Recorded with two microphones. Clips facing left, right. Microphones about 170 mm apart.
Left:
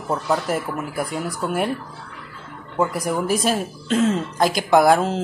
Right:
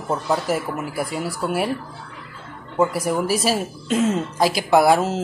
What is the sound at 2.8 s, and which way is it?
Speech, 5° right (ahead or behind).